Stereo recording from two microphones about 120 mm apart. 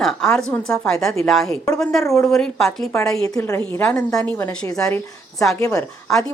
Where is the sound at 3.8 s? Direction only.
10° left (ahead or behind).